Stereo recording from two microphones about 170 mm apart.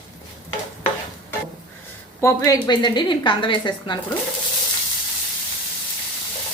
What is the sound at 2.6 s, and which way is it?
A woman's voice, 25° left (ahead or behind).